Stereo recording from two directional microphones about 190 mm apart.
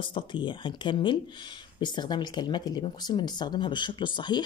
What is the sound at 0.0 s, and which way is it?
Speech, 25° left (ahead or behind).